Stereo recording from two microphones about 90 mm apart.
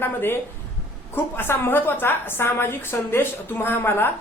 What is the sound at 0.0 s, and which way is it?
A woman's voice, 25° left (ahead or behind).